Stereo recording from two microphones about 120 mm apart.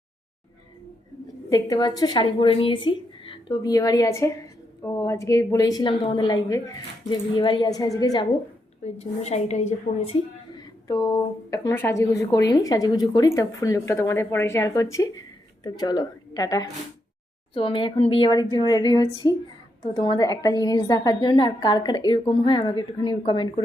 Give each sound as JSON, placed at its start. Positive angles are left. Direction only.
{"t": 1.5, "sound": "a woman's voice", "side_deg": 35}
{"t": 8.8, "sound": "a woman's voice", "side_deg": 65}
{"t": 10.8, "sound": "a woman's voice", "side_deg": 30}
{"t": 17.5, "sound": "a woman's voice", "side_deg": 45}